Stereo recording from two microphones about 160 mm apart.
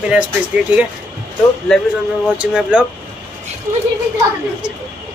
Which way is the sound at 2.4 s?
5° right (ahead or behind).